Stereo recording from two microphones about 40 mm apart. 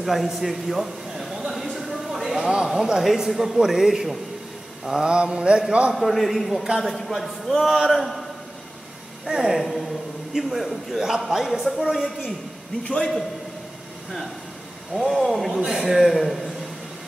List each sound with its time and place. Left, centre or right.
0.0 s a man's voice: centre
5.0 s mantra: right
5.9 s a man's voice: centre
9.2 s a man's voice: centre
12.8 s a man's voice: left
15.0 s a man's voice: centre
15.6 s a man's voice: centre